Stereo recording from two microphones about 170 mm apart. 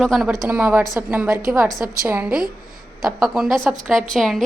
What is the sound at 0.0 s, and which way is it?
A woman's voice, centre (ahead or behind).